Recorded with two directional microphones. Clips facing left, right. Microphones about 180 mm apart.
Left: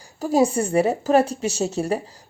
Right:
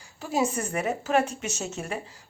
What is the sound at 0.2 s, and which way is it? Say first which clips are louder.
A woman's voice: left 8 dB; 40° left (ahead or behind).